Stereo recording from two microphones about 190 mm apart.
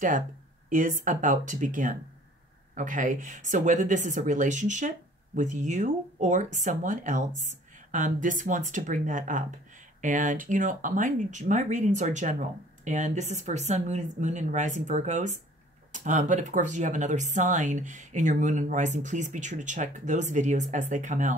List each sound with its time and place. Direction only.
0.7 s speech: 45° right (ahead or behind)